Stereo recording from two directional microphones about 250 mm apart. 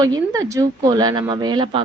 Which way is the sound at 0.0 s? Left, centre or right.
Centre.